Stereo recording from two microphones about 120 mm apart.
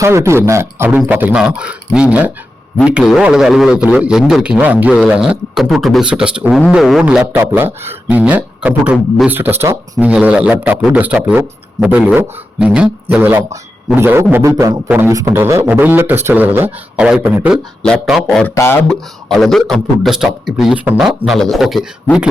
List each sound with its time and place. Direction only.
0.0 s a man's voice: 25° right (ahead or behind); by 7.3 s 5° right (ahead or behind)
7.3 s a man's voice: 20° right (ahead or behind)
10.0 s a man's voice: 10° right (ahead or behind)
18.1 s a man's voice: 5° left (ahead or behind)
18.5 s speech: 20° left (ahead or behind)
18.9 s a man's voice: 5° left (ahead or behind)